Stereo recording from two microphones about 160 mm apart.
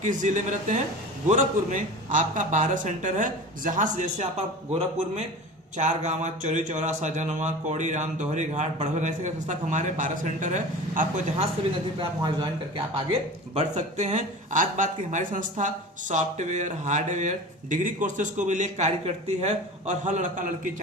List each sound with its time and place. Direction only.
0.0 s a man's voice: 50° right (ahead or behind)
11.9 s a man's voice: 30° right (ahead or behind); by 20.5 s 55° right (ahead or behind)